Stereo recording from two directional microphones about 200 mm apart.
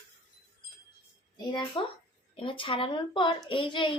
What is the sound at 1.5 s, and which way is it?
A woman's voice, 20° left (ahead or behind).